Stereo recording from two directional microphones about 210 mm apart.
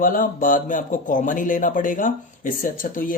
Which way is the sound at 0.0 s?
40° left (ahead or behind).